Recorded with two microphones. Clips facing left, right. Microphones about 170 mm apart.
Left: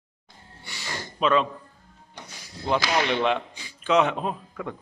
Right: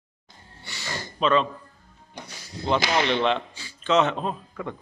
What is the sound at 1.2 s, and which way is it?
Speech, 5° left (ahead or behind).